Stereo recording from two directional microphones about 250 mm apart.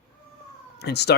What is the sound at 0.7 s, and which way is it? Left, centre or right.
Speech, left.